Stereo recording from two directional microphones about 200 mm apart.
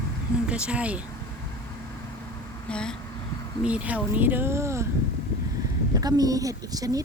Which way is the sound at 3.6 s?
5° right (ahead or behind).